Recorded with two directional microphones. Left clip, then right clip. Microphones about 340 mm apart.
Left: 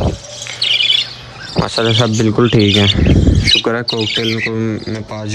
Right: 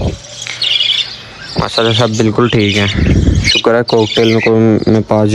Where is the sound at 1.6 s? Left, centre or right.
Centre.